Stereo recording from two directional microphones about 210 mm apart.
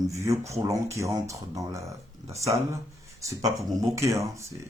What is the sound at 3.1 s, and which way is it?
Speech, 15° right (ahead or behind).